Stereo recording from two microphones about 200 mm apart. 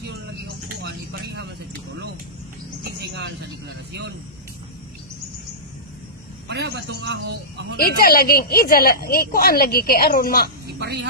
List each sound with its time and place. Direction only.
0.8 s vehicle: 55° right (ahead or behind)
2.8 s bird: 55° right (ahead or behind)
6.5 s speech: 55° right (ahead or behind)
7.7 s speech: 50° left (ahead or behind)
10.7 s speech: 55° right (ahead or behind)